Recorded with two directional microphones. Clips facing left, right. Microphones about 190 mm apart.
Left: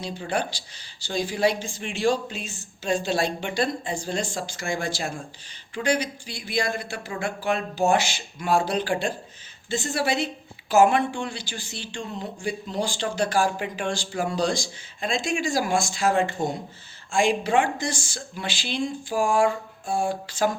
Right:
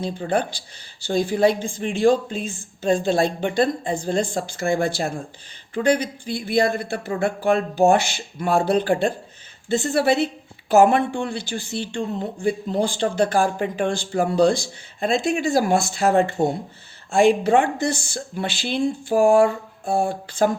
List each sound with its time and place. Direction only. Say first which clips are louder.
0.0 s a woman's voice: right 5 dB; 50° right (ahead or behind)
16.4 s speech: right 6 dB; 35° right (ahead or behind)
17.1 s a woman's voice: right 6 dB; 55° right (ahead or behind)